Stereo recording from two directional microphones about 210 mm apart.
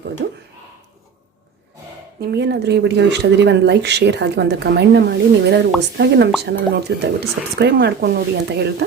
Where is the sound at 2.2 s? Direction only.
50° right (ahead or behind).